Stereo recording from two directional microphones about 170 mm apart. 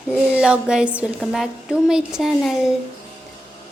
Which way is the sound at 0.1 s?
5° right (ahead or behind).